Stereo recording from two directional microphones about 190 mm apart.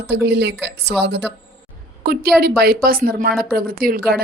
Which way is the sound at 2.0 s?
50° right (ahead or behind).